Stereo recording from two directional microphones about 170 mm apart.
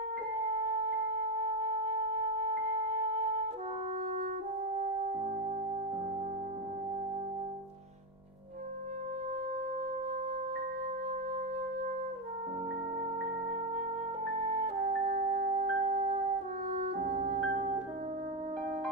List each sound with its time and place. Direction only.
0.7 s wind instrument: 50° right (ahead or behind)
14.3 s music: 50° right (ahead or behind)